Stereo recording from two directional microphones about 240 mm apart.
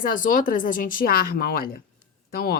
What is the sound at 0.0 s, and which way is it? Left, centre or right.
A woman's voice, left.